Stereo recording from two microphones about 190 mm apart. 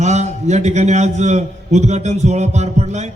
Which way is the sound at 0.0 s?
35° right (ahead or behind).